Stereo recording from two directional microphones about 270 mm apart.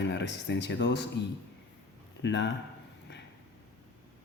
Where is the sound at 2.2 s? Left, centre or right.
Left.